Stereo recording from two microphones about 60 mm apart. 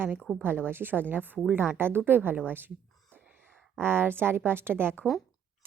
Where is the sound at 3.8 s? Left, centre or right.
Right.